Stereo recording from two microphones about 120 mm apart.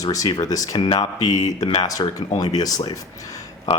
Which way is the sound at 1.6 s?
45° left (ahead or behind).